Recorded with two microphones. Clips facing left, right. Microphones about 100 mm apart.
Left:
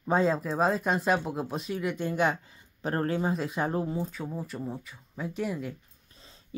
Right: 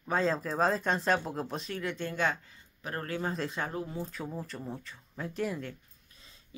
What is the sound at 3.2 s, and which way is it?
Speech, 10° left (ahead or behind).